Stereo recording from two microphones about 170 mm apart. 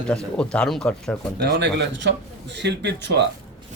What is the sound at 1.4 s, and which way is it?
A man's voice, 75° right (ahead or behind).